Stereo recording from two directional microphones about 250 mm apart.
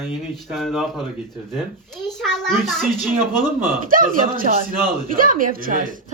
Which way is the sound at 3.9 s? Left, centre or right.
Right.